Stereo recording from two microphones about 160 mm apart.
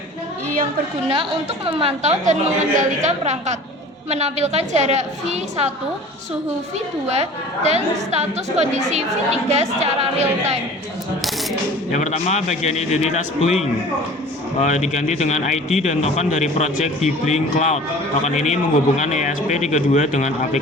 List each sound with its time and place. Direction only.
1.1 s a woman's voice: 35° right (ahead or behind)
7.1 s a woman's voice: 45° right (ahead or behind)
11.9 s speech: 45° left (ahead or behind)
14.6 s speech: 45° left (ahead or behind)